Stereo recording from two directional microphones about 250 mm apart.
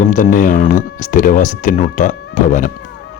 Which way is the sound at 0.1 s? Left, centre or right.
Left.